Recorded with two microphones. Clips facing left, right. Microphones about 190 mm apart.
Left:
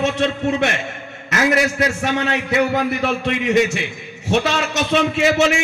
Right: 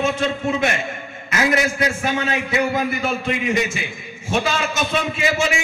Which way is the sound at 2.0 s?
70° left (ahead or behind).